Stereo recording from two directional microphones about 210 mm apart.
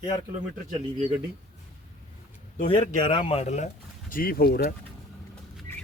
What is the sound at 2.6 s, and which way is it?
Speech, 25° left (ahead or behind).